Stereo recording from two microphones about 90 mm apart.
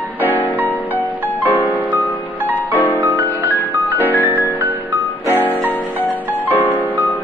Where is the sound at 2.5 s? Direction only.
20° left (ahead or behind).